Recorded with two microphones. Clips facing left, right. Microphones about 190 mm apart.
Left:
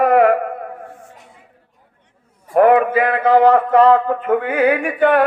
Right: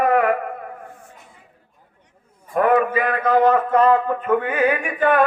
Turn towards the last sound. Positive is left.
turn(degrees=75)  # may be behind; listen again after turning